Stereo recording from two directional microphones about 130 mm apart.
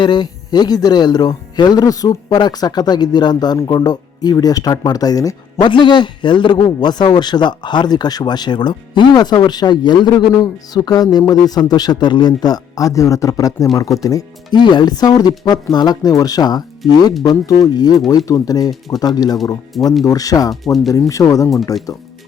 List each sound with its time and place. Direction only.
0.0 s speech: 35° left (ahead or behind)
19.7 s speech: centre (ahead or behind)
20.1 s speech: 25° left (ahead or behind)